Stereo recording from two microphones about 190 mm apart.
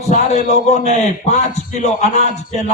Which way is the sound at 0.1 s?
35° left (ahead or behind).